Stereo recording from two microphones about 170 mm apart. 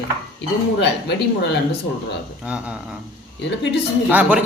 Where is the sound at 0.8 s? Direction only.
85° left.